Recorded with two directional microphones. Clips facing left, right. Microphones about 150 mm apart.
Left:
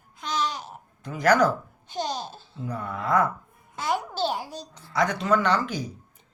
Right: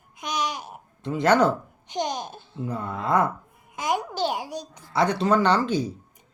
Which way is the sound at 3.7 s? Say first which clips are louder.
Right 1 dB; 15° right (ahead or behind).